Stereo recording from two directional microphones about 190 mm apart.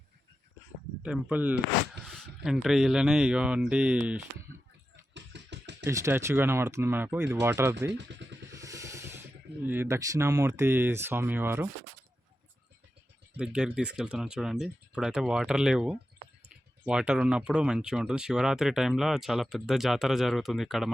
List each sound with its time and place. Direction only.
1.0 s speech: 5° right (ahead or behind)
5.1 s music: 65° right (ahead or behind)
5.8 s speech: 15° right (ahead or behind)
7.9 s a sound: 65° right (ahead or behind)
8.5 s vehicle: 15° right (ahead or behind)
9.6 s speech: 10° right (ahead or behind)
13.3 s speech: 5° right (ahead or behind)